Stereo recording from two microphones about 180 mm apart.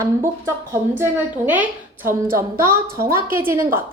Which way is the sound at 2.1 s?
15° right (ahead or behind).